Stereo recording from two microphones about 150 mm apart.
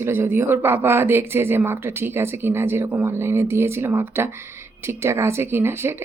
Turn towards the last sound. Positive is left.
turn(degrees=-15)  # may be behind; listen again after turning